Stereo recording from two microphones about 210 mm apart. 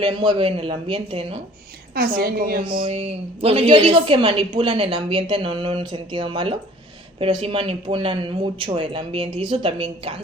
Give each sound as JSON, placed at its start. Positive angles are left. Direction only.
{"t": 0.0, "sound": "speech", "side_deg": -20}
{"t": 2.0, "sound": "a woman's voice", "side_deg": -45}
{"t": 2.6, "sound": "speech", "side_deg": -25}